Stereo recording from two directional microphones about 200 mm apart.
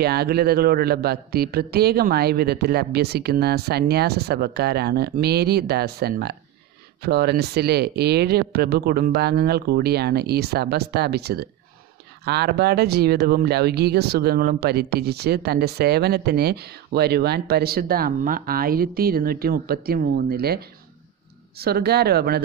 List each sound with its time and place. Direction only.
0.0 s speech: 50° right (ahead or behind)